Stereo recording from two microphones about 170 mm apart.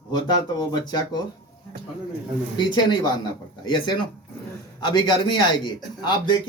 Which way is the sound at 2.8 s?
25° left (ahead or behind).